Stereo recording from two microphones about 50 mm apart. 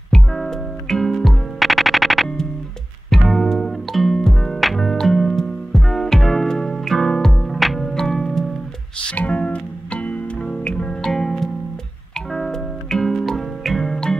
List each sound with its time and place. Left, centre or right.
0.1 s music: centre
9.1 s music: left
11.0 s music: centre